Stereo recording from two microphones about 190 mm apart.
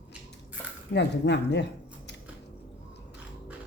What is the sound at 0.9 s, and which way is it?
Speech, 65° left (ahead or behind).